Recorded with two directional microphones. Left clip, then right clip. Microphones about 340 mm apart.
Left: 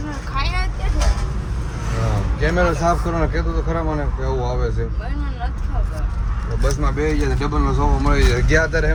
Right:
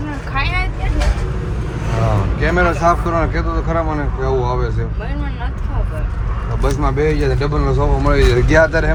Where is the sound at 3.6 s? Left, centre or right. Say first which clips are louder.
Right 4 dB; right.